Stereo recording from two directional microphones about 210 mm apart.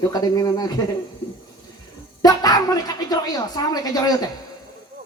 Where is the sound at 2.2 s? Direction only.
20° left (ahead or behind).